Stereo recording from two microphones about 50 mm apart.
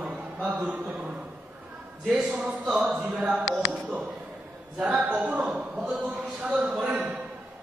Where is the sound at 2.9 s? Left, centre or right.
Right.